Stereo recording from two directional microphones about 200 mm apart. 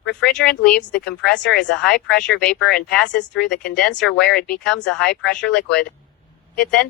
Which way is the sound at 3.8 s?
5° left (ahead or behind).